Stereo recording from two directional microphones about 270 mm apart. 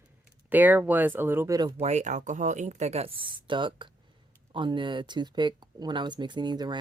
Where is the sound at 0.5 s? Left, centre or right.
Centre.